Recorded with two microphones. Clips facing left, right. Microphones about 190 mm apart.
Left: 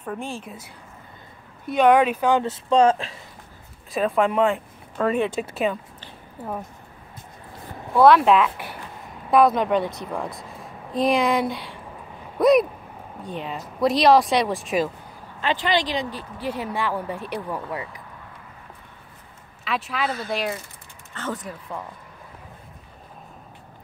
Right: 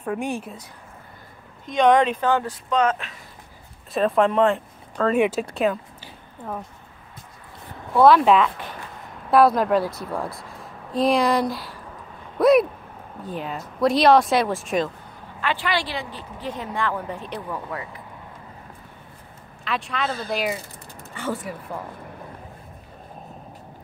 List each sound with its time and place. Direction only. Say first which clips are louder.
0.0 s speech: right 5 dB; 10° right (ahead or behind)
1.7 s speech: even; 10° left (ahead or behind); by 3.2 s 30° left (ahead or behind)
3.9 s speech: right 2 dB; centre (ahead or behind)
5.1 s speech: right 7 dB; 10° right (ahead or behind)
5.4 s speech: right 2 dB; centre (ahead or behind)
8.0 s speech: even; centre (ahead or behind)
12.4 s a sound: right 1 dB; centre (ahead or behind)
13.2 s speech: right 1 dB; centre (ahead or behind)
15.4 s speech: left 2 dB; 20° left (ahead or behind)
19.6 s speech: even; 5° left (ahead or behind)